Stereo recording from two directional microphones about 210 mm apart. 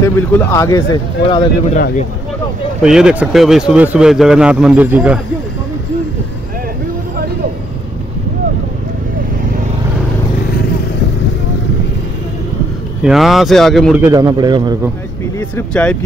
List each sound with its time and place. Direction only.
0.0 s speech: 15° left (ahead or behind)
2.8 s speech: 5° right (ahead or behind)
13.0 s speech: centre (ahead or behind)
14.0 s a man's voice: 15° right (ahead or behind)
15.3 s speech: 10° left (ahead or behind)